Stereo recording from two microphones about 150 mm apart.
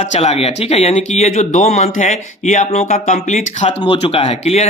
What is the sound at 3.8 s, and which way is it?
Speech, 35° left (ahead or behind).